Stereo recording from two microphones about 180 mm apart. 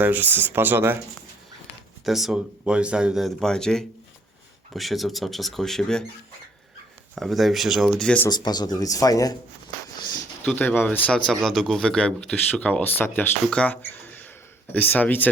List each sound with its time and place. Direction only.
0.0 s speech: 10° right (ahead or behind)
2.0 s speech: centre (ahead or behind)
7.2 s speech: centre (ahead or behind)
8.3 s speech: 25° left (ahead or behind)
10.4 s speech: 5° left (ahead or behind)